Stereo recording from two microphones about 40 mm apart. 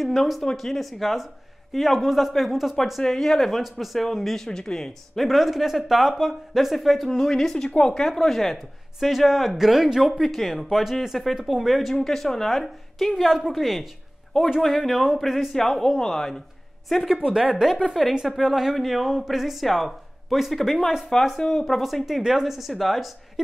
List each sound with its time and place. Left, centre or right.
0.0 s speech: centre
3.0 s speech: centre
4.5 s speech: centre
5.1 s speech: centre
8.5 s speech: centre
10.2 s speech: centre
12.0 s speech: centre
16.9 s speech: centre
17.3 s speech: centre
18.0 s speech: centre
21.1 s speech: centre
21.5 s speech: centre